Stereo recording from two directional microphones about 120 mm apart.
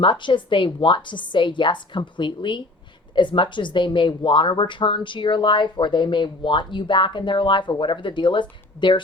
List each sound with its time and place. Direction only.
0.0 s speech: 40° left (ahead or behind)